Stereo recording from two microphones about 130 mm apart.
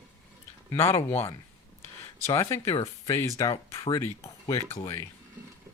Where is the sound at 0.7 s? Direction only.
20° left (ahead or behind).